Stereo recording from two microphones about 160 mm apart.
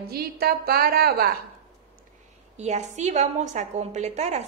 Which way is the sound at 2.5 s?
45° right (ahead or behind).